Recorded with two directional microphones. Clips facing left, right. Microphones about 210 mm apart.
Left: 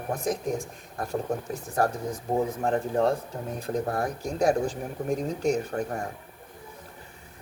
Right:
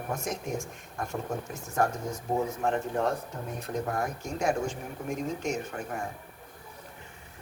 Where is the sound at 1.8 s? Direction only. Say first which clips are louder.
Left 2 dB; 35° left (ahead or behind).